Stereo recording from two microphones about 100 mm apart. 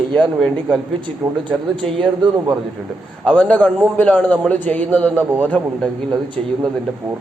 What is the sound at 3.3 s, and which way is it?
A man's voice, 10° left (ahead or behind).